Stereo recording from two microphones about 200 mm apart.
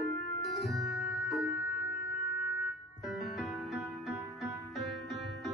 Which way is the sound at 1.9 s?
55° left (ahead or behind).